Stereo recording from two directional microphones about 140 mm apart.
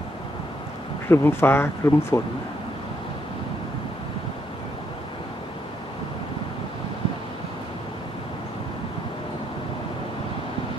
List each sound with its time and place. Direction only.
1.0 s speech: 15° left (ahead or behind)